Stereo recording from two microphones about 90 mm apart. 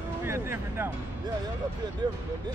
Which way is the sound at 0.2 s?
25° right (ahead or behind).